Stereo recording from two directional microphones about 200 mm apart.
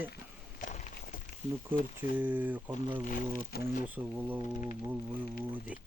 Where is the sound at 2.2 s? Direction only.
10° right (ahead or behind).